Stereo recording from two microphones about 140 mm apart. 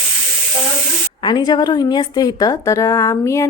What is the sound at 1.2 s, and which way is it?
A woman's voice, 30° left (ahead or behind).